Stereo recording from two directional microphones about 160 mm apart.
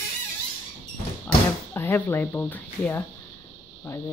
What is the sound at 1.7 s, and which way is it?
Speech, 10° left (ahead or behind).